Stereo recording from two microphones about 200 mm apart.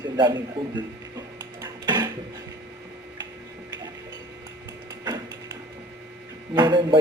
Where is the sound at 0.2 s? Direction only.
20° right (ahead or behind).